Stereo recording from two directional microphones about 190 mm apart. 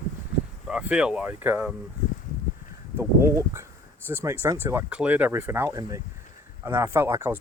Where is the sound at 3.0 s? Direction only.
15° right (ahead or behind).